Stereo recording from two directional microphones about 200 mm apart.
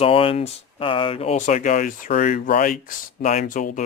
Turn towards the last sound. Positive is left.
turn(degrees=40)  # may be behind; listen again after turning